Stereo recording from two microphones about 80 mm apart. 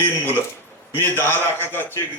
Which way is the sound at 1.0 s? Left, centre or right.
Left.